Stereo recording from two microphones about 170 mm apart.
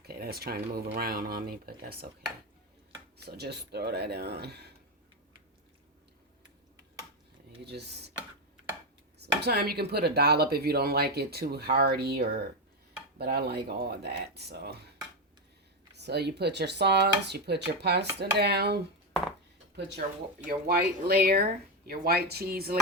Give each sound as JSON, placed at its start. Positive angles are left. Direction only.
{"t": 0.0, "sound": "speech", "side_deg": -65}
{"t": 3.2, "sound": "speech", "side_deg": -70}
{"t": 7.6, "sound": "speech", "side_deg": -75}
{"t": 9.1, "sound": "speech", "side_deg": -75}
{"t": 16.0, "sound": "speech", "side_deg": -80}
{"t": 20.5, "sound": "speech", "side_deg": -65}